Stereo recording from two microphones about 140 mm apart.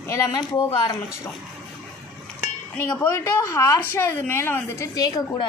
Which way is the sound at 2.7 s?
15° left (ahead or behind).